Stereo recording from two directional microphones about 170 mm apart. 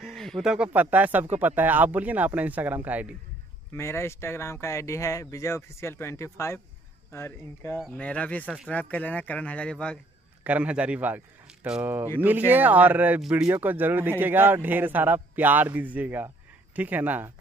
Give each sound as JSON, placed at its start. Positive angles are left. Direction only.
{"t": 0.0, "sound": "speech", "side_deg": 0}
{"t": 3.7, "sound": "speech", "side_deg": 15}
{"t": 10.4, "sound": "speech", "side_deg": -10}